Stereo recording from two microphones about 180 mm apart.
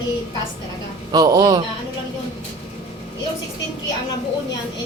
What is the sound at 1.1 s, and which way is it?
Speech, 20° right (ahead or behind).